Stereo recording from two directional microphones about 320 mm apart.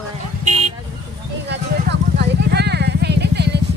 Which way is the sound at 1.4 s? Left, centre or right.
Right.